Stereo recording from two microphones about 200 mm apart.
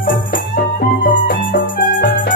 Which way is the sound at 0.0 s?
45° left (ahead or behind).